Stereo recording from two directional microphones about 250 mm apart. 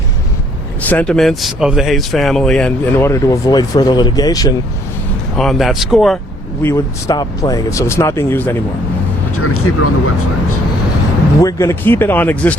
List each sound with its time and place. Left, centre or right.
0.8 s speech: centre
5.4 s speech: centre
6.6 s speech: centre
9.4 s speech: left
11.3 s speech: centre